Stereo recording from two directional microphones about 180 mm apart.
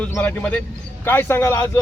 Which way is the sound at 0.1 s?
10° left (ahead or behind).